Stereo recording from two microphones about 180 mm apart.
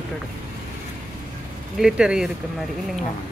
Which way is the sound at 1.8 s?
5° right (ahead or behind).